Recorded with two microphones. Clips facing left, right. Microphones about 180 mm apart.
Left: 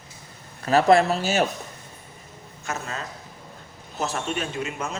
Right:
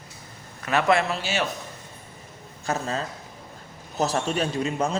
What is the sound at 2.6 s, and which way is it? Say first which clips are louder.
Speech: right 5 dB; 35° right (ahead or behind).